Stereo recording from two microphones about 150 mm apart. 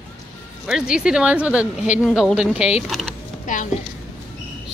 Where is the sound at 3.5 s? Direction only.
60° left (ahead or behind).